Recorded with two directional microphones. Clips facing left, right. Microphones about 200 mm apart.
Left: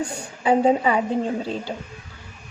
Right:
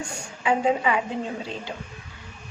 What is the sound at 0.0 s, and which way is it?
A woman's voice, 35° left (ahead or behind).